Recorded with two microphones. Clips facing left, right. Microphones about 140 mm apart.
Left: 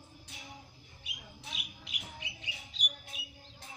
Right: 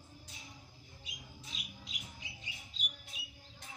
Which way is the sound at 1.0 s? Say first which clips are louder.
Left 4 dB; 70° left (ahead or behind).